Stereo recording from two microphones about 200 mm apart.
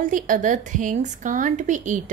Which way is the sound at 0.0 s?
40° right (ahead or behind).